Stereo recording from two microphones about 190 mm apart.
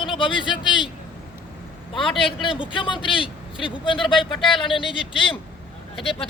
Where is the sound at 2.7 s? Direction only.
25° left (ahead or behind).